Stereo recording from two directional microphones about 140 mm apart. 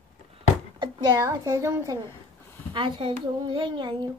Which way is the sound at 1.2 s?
20° right (ahead or behind).